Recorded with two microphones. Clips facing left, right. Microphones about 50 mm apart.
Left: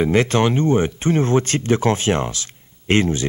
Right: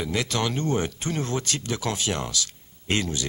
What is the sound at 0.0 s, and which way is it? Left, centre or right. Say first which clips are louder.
Speech: left 10 dB; left.